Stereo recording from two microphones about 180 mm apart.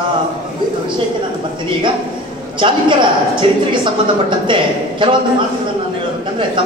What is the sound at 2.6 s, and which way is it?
A man's voice, 25° right (ahead or behind).